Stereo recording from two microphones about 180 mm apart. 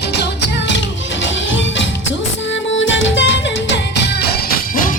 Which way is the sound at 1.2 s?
90° left.